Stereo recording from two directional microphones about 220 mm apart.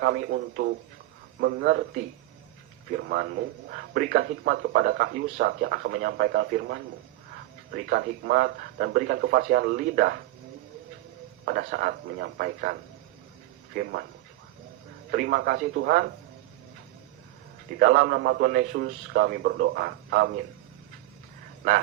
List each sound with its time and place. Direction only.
0.0 s speech: 50° right (ahead or behind)
2.9 s speech: 45° right (ahead or behind)
11.4 s speech: 45° right (ahead or behind)
13.7 s speech: 45° right (ahead or behind)
15.1 s speech: 45° right (ahead or behind)
17.7 s speech: 45° right (ahead or behind)